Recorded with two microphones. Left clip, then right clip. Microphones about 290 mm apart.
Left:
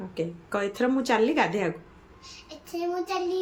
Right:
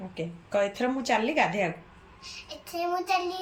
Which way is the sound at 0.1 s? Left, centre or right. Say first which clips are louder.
Even; centre.